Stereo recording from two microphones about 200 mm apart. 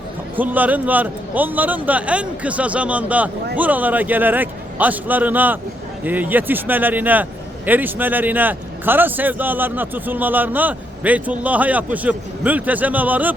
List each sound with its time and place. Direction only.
0.3 s a man's voice: 10° right (ahead or behind)